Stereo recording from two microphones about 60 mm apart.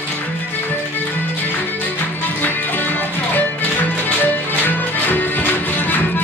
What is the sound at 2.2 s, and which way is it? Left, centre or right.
Music, left.